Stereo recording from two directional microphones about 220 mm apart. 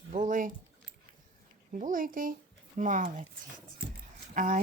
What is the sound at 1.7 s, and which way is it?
Speech, 35° right (ahead or behind).